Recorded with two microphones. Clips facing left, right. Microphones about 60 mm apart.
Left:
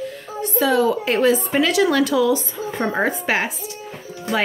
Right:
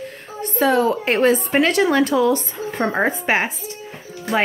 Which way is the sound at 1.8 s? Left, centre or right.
Right.